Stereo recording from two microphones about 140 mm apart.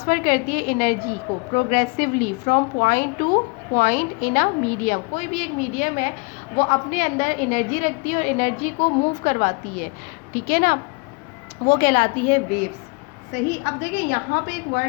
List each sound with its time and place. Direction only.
0.1 s a woman's voice: 70° left (ahead or behind)
10.3 s a woman's voice: 90° left
11.6 s a woman's voice: 80° left; by 12.6 s 60° left (ahead or behind)
13.3 s a woman's voice: 90° left